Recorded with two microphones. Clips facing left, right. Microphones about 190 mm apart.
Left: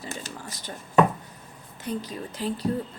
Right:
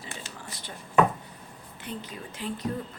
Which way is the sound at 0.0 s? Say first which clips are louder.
Left 5 dB; 40° left (ahead or behind).